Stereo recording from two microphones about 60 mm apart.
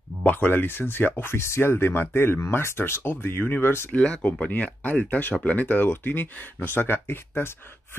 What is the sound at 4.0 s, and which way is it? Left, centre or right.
Speech, centre.